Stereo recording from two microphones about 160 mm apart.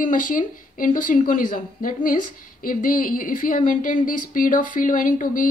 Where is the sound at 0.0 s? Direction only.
55° left (ahead or behind).